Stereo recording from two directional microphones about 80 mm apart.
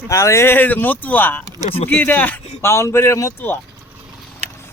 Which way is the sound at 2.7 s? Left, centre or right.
Left.